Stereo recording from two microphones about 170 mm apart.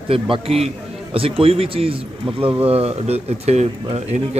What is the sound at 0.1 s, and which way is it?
Speech, 35° right (ahead or behind).